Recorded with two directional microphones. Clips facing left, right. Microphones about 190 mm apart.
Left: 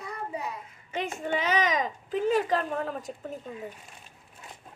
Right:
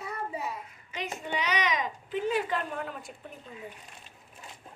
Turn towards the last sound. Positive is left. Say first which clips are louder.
# left 5 dB
turn(degrees=40)  # may be behind; listen again after turning